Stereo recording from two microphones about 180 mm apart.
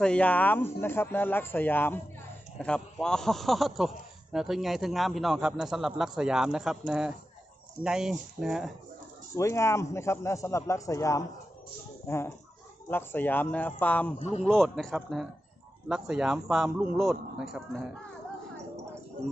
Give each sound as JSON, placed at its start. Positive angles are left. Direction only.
{"t": 0.0, "sound": "a man's voice", "side_deg": 5}
{"t": 9.3, "sound": "a man's voice", "side_deg": 15}